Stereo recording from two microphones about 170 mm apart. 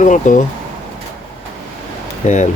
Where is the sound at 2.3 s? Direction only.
45° left (ahead or behind).